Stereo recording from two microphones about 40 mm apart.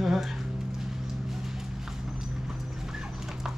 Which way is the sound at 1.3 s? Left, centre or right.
Centre.